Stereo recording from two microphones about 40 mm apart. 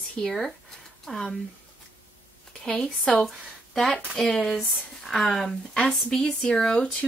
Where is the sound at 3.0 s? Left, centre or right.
Centre.